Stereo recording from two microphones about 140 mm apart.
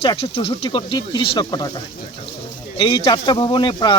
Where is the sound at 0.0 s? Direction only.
40° left (ahead or behind).